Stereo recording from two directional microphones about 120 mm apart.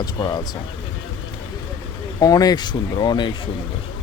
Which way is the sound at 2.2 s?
30° left (ahead or behind).